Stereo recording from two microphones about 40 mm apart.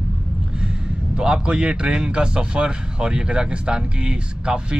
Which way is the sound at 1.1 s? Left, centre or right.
Right.